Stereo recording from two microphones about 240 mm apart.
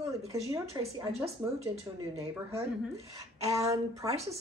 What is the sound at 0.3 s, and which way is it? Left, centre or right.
Speech, centre.